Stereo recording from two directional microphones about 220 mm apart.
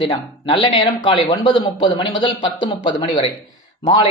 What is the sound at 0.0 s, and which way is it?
Speech, 25° left (ahead or behind).